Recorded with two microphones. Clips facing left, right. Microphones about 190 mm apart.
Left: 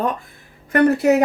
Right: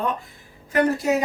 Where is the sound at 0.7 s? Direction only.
65° left (ahead or behind).